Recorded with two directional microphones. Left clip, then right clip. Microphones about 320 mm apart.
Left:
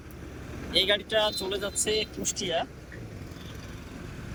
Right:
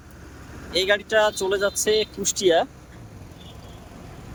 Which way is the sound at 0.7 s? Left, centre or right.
Centre.